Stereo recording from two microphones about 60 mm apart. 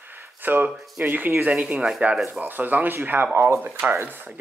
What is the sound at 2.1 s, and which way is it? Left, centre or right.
Speech, centre.